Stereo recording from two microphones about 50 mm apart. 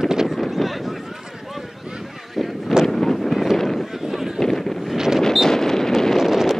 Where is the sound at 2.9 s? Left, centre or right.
Centre.